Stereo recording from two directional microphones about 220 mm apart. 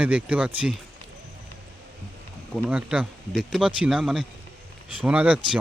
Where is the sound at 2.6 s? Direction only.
5° right (ahead or behind).